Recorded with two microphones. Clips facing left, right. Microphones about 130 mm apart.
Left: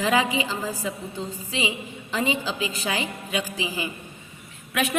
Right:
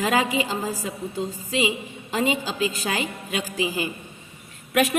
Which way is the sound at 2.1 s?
45° right (ahead or behind).